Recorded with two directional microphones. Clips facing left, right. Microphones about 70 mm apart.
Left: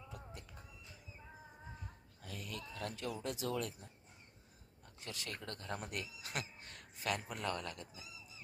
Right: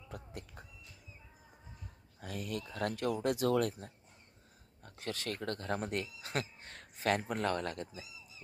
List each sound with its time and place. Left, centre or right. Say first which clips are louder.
0.1 s a sound: right 9 dB; right
2.2 s speech: right 7 dB; right
4.8 s speech: right 8 dB; right
5.8 s speech: right 7 dB; right